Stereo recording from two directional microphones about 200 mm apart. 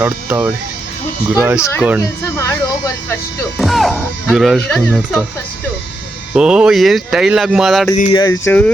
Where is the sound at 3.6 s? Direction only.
Centre (ahead or behind).